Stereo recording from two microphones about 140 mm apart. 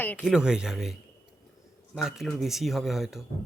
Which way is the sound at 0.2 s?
5° right (ahead or behind).